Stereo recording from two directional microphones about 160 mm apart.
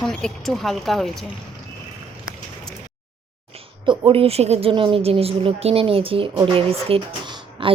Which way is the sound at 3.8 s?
35° right (ahead or behind).